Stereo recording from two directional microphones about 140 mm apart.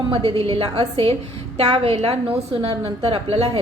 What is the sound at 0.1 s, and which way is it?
A woman's voice, 40° right (ahead or behind).